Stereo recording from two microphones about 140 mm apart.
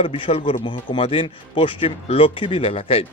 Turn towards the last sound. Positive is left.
turn(degrees=45)  # may be behind; listen again after turning